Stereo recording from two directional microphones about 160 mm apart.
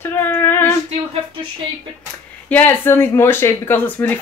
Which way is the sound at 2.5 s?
15° left (ahead or behind).